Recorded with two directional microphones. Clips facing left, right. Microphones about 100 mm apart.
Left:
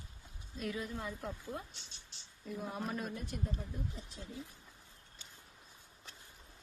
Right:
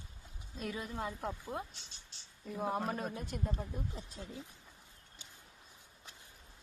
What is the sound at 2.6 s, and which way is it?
Speech, 55° right (ahead or behind).